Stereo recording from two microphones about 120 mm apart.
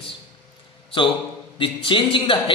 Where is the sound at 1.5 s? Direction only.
45° left (ahead or behind).